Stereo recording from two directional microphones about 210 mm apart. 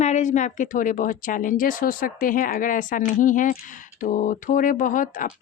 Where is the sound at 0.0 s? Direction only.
35° left (ahead or behind).